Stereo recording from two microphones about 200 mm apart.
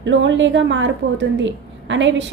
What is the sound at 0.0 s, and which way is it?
A woman's voice, 65° right (ahead or behind).